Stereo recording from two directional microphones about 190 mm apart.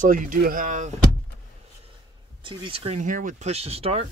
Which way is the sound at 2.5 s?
30° right (ahead or behind).